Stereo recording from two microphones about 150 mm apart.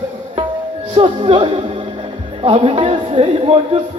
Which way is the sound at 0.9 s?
40° right (ahead or behind).